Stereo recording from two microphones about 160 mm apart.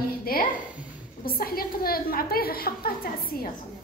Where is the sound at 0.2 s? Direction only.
65° left (ahead or behind).